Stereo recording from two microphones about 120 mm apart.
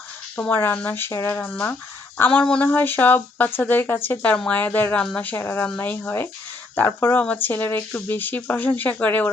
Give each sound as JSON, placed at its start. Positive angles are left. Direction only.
{"t": 0.3, "sound": "speech", "side_deg": 15}
{"t": 1.5, "sound": "speech", "side_deg": 10}